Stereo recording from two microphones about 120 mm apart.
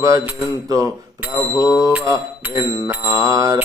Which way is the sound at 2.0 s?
30° right (ahead or behind).